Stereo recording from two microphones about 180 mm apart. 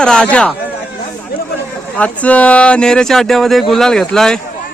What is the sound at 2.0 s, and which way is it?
Speech, 5° left (ahead or behind).